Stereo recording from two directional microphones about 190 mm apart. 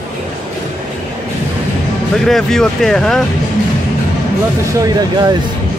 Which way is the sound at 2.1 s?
Centre (ahead or behind).